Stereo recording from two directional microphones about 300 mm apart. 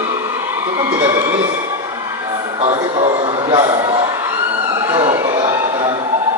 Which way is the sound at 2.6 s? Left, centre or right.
Centre.